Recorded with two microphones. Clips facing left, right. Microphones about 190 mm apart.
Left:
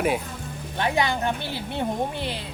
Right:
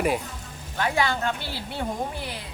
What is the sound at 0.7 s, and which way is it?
A woman's voice, 20° left (ahead or behind).